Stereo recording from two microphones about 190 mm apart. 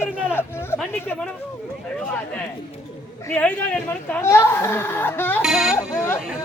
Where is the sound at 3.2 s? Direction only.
5° left (ahead or behind).